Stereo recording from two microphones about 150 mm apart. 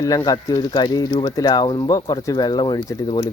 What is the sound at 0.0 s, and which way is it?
Speech, 25° left (ahead or behind).